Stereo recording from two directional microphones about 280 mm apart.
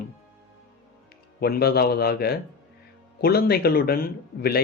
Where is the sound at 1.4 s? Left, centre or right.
Left.